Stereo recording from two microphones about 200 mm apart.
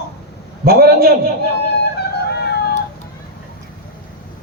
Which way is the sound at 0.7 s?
50° right (ahead or behind).